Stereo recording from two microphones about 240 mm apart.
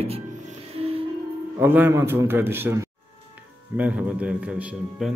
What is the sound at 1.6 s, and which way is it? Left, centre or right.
A man's voice, centre.